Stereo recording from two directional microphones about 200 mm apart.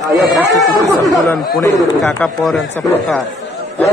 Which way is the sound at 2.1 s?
5° left (ahead or behind).